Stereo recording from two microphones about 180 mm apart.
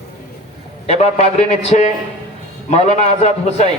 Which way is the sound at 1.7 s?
40° left (ahead or behind).